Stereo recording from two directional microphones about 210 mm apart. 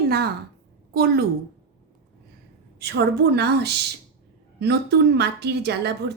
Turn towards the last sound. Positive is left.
turn(degrees=-50)  # may be behind; listen again after turning